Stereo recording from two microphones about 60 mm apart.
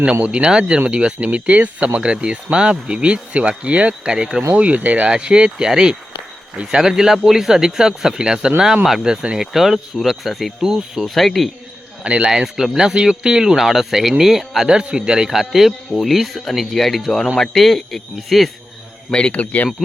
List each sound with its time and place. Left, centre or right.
0.0 s speech: centre
4.5 s speech: right
11.0 s speech: centre
12.0 s speech: centre
12.3 s speech: centre
19.3 s speech: left